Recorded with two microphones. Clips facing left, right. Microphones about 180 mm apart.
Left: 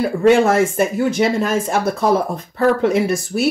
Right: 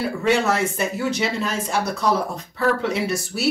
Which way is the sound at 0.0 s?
50° left (ahead or behind).